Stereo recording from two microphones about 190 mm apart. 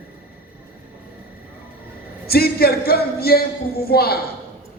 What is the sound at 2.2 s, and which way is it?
Speech, 55° left (ahead or behind).